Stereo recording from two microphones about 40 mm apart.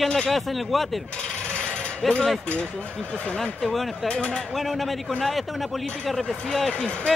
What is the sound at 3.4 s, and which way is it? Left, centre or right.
Speech, centre.